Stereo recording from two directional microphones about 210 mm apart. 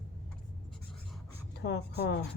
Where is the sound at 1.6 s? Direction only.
50° left (ahead or behind).